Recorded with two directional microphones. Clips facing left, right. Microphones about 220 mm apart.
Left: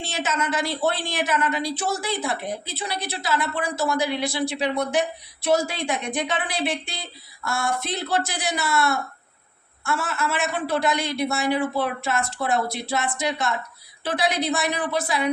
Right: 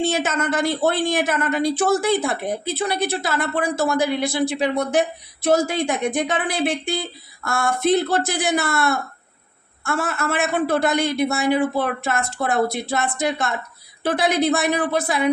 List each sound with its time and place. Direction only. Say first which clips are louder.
0.0 s a woman's voice: right 6 dB; 55° right (ahead or behind)